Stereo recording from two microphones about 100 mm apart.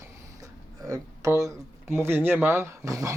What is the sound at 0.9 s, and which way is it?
Speech, 35° right (ahead or behind).